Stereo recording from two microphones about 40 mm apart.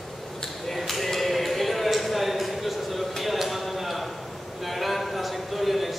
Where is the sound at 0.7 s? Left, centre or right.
Centre.